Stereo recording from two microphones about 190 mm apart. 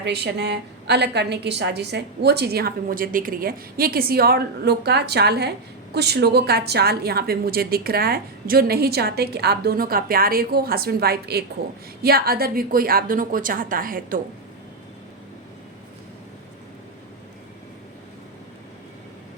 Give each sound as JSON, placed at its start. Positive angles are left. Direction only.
{"t": 0.0, "sound": "a woman's voice", "side_deg": -60}